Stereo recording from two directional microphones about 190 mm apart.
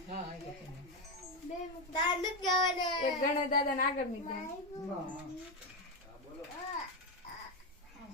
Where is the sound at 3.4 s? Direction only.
45° left (ahead or behind).